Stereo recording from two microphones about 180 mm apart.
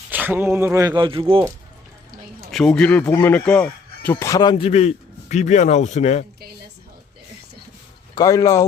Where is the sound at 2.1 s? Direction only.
50° right (ahead or behind).